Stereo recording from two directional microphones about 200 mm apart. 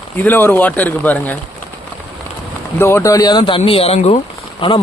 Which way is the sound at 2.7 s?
10° left (ahead or behind).